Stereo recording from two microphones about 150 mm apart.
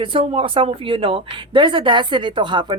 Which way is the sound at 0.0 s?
35° right (ahead or behind).